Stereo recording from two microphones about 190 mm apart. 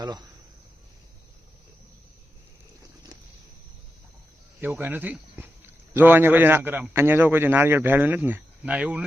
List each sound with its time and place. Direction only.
0.0 s speech: 20° right (ahead or behind)
4.6 s a man's voice: 10° right (ahead or behind)